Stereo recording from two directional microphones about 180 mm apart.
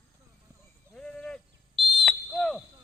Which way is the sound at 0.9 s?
5° left (ahead or behind).